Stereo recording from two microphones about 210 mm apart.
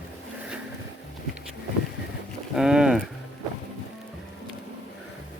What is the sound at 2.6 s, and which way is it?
Speech, 5° right (ahead or behind).